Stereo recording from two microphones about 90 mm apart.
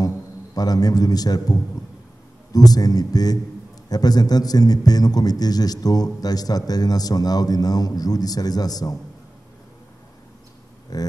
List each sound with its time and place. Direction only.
0.6 s a man's voice: 45° left (ahead or behind)
10.9 s a man's voice: 45° left (ahead or behind)